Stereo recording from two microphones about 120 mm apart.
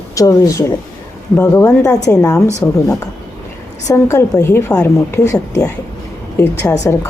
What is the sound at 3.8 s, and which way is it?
Speech, 25° left (ahead or behind).